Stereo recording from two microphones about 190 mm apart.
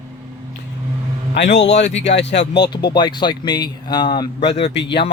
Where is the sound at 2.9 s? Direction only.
25° left (ahead or behind).